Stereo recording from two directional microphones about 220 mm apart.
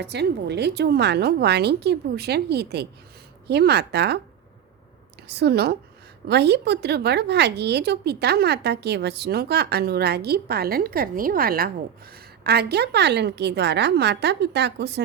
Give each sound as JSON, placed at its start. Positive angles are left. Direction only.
{"t": 0.0, "sound": "speech", "side_deg": -50}
{"t": 5.3, "sound": "speech", "side_deg": -50}